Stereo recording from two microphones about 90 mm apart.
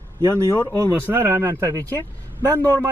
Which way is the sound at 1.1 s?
25° right (ahead or behind).